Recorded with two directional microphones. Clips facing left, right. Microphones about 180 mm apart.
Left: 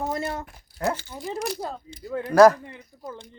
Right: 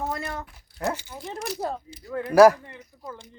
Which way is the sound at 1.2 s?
Centre (ahead or behind).